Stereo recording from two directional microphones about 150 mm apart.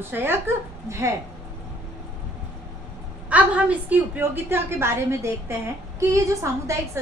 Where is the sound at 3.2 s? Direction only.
10° right (ahead or behind).